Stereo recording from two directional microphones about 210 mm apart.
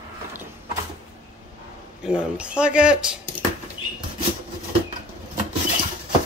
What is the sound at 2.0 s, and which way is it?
Speech, 5° right (ahead or behind).